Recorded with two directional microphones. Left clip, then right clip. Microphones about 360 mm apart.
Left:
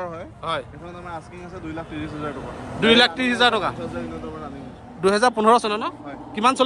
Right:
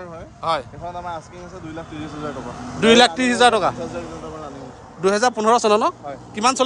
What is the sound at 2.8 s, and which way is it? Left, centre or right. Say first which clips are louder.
Speech: right 3 dB; centre.